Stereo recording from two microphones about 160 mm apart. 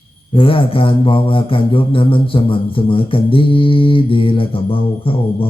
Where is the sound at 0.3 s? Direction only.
35° left (ahead or behind).